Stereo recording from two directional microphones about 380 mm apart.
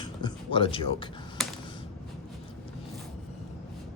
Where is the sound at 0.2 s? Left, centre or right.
Centre.